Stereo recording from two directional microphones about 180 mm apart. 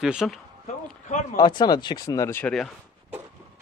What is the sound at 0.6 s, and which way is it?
Speech, 40° left (ahead or behind).